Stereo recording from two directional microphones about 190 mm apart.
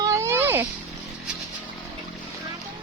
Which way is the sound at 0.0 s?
15° right (ahead or behind).